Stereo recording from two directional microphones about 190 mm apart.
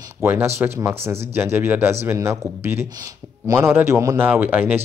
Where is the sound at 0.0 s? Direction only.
15° right (ahead or behind).